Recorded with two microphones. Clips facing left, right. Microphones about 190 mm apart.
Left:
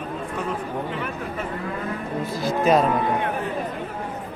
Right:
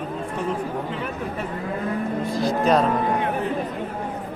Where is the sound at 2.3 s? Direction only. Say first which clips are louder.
Left 1 dB; 5° left (ahead or behind).